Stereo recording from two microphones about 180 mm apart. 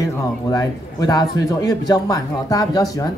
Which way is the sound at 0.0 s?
20° left (ahead or behind).